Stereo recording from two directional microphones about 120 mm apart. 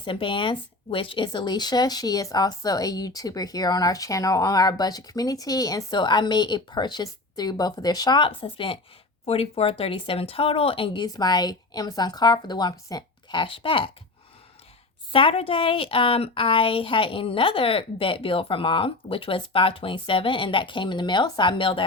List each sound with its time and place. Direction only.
0.0 s a woman's voice: 45° left (ahead or behind)
11.0 s speech: 35° left (ahead or behind)
15.1 s a woman's voice: 50° left (ahead or behind)